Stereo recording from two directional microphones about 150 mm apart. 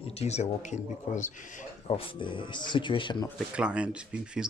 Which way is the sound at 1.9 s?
35° left (ahead or behind).